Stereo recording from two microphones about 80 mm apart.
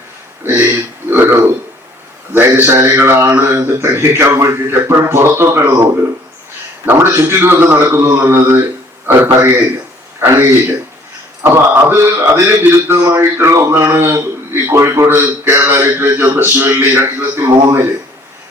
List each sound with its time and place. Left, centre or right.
0.4 s a sound: right
2.3 s a man's voice: right
6.8 s a man's voice: right